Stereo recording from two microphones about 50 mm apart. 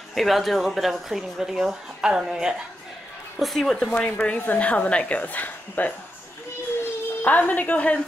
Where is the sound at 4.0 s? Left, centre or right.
Left.